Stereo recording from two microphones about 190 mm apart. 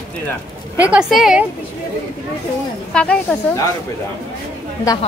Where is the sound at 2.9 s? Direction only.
5° left (ahead or behind).